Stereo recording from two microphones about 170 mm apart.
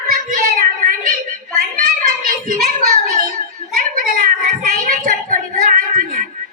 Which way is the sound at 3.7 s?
55° right (ahead or behind).